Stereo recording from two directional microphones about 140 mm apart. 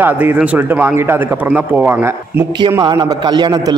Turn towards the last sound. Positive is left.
turn(degrees=-30)  # may be behind; listen again after turning